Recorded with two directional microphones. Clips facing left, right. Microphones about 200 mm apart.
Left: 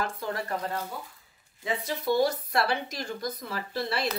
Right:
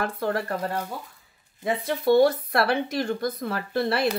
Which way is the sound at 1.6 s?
55° right (ahead or behind).